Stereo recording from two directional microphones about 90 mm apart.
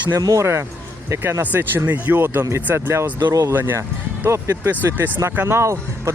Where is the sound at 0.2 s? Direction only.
40° right (ahead or behind).